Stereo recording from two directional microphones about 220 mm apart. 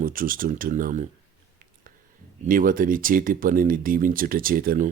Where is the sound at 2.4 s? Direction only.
40° right (ahead or behind).